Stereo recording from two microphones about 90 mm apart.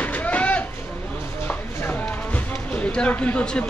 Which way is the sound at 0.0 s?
20° left (ahead or behind).